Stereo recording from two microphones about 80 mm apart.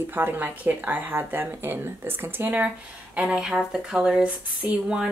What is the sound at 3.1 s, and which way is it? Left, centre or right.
Speech, centre.